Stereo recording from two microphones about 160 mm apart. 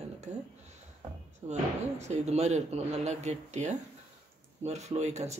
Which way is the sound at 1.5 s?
45° right (ahead or behind).